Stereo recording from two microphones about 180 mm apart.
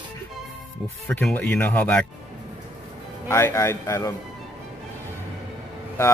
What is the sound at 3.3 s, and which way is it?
Speech, 15° left (ahead or behind).